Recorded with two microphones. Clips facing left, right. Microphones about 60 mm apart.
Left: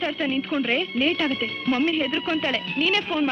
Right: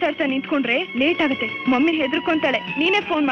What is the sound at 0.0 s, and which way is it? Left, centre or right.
A man's voice, right.